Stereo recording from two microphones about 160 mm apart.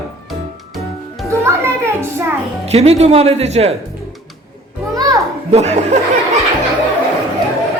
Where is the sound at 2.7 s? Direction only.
40° right (ahead or behind).